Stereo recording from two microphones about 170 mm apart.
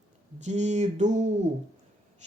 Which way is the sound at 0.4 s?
45° right (ahead or behind).